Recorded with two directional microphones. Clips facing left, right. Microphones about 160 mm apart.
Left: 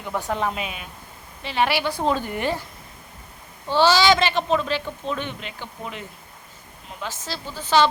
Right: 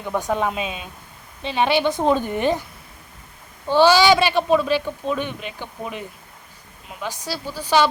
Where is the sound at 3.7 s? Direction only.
15° right (ahead or behind).